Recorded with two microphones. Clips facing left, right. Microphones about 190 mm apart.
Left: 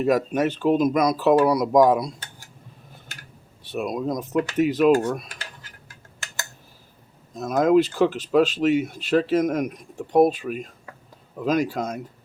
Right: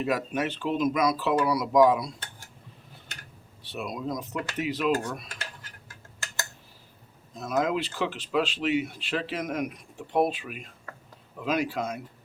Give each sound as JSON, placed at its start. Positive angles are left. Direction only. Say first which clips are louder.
{"t": 0.0, "sound": "speech", "louder": "left 7 dB", "side_deg": 45}
{"t": 3.6, "sound": "speech", "louder": "left 7 dB", "side_deg": 45}
{"t": 7.3, "sound": "speech", "louder": "left 9 dB", "side_deg": 45}